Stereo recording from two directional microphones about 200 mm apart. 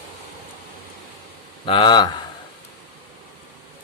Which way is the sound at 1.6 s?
25° left (ahead or behind).